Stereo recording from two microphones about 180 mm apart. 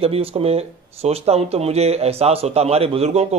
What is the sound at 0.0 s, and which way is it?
Speech, 35° right (ahead or behind).